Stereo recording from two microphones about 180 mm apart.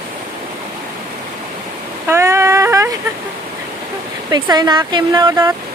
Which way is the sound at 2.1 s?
15° right (ahead or behind).